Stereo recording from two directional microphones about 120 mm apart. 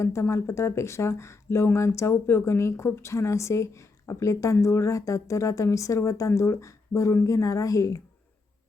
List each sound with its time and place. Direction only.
0.0 s speech: 25° left (ahead or behind)